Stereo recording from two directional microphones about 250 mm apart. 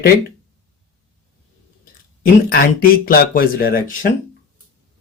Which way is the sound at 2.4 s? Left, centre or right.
Left.